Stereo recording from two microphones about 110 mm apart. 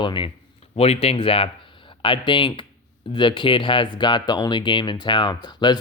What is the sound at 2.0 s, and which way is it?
Speech, 50° left (ahead or behind).